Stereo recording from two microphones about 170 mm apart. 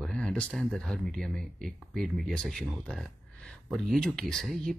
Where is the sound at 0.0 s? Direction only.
5° left (ahead or behind).